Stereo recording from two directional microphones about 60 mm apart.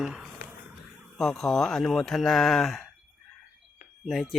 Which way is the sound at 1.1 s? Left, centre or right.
Centre.